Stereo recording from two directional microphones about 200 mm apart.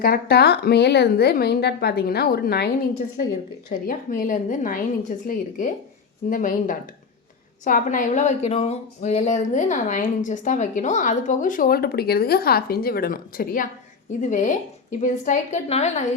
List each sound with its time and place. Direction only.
0.0 s a woman's voice: 50° left (ahead or behind)
3.7 s speech: 40° left (ahead or behind)